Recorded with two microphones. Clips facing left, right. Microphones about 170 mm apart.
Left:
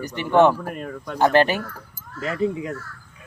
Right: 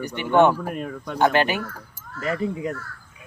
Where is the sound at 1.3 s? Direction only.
35° left (ahead or behind).